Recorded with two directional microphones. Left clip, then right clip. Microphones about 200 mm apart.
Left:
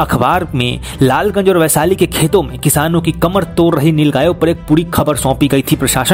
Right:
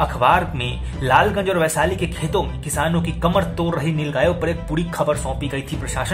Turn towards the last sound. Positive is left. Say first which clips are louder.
# left 12 dB
turn(degrees=45)  # may be behind; listen again after turning